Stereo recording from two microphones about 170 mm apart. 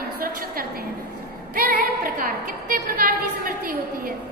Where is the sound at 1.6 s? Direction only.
60° right (ahead or behind).